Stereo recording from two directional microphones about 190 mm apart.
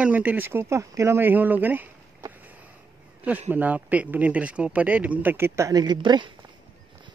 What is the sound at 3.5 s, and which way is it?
Speech, 10° right (ahead or behind).